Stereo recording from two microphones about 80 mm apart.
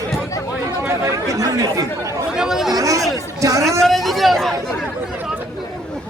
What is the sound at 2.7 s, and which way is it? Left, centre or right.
Speech, right.